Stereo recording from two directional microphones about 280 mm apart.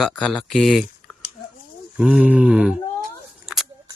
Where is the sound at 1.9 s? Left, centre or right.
Centre.